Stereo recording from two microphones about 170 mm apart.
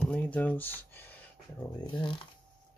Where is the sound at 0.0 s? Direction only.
5° left (ahead or behind).